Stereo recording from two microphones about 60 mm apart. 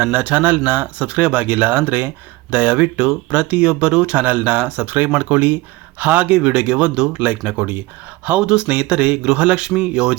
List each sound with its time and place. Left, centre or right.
0.0 s speech: right